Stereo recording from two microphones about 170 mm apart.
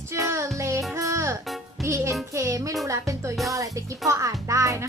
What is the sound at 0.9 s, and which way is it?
Music, 20° right (ahead or behind).